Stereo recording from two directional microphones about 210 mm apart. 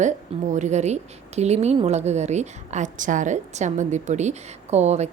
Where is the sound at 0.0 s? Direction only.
35° right (ahead or behind).